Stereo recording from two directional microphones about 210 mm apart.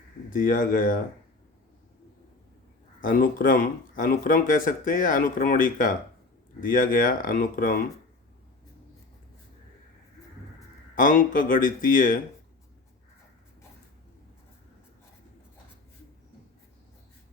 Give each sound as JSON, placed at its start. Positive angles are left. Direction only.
{"t": 0.3, "sound": "speech", "side_deg": 40}
{"t": 3.1, "sound": "speech", "side_deg": 40}
{"t": 10.9, "sound": "speech", "side_deg": 40}